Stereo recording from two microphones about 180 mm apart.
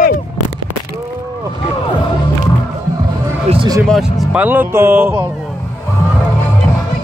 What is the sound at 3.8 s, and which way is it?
Speech, centre (ahead or behind).